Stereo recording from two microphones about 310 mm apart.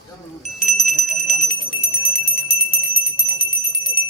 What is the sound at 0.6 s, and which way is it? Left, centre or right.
Bell, left.